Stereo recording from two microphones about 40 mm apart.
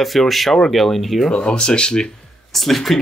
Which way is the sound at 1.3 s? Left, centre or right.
Left.